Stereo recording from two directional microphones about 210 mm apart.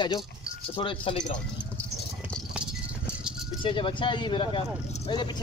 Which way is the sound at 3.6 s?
25° left (ahead or behind).